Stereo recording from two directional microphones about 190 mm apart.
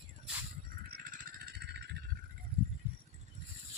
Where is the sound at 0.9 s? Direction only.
45° right (ahead or behind).